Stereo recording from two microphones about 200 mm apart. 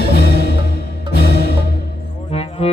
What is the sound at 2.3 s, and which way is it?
Music, 30° left (ahead or behind).